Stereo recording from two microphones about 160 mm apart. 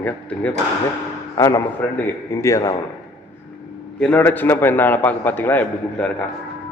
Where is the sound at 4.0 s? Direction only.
10° left (ahead or behind).